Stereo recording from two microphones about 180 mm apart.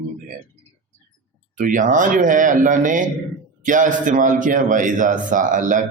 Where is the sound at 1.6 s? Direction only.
45° right (ahead or behind).